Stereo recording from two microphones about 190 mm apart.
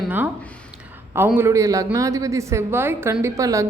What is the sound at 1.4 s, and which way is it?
A woman's voice, 15° right (ahead or behind).